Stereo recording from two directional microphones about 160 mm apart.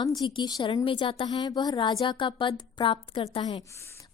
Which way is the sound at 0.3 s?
30° left (ahead or behind).